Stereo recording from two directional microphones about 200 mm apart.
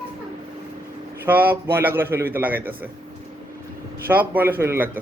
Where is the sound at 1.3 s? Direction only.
10° right (ahead or behind).